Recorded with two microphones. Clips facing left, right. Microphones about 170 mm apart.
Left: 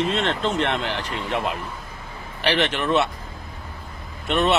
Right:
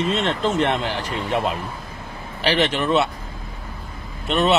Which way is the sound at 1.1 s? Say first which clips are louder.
Right 5 dB; 30° right (ahead or behind).